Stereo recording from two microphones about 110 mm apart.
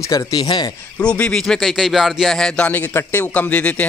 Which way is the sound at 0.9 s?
10° left (ahead or behind).